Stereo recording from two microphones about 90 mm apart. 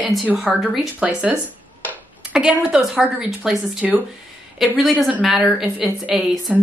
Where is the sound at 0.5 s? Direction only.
15° right (ahead or behind).